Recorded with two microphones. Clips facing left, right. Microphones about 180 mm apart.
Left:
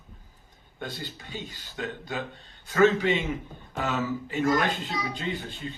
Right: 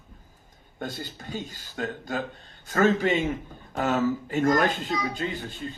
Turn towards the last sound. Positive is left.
turn(degrees=-45)  # may be behind; listen again after turning